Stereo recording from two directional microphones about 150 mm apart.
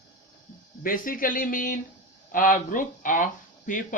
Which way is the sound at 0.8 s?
70° left (ahead or behind).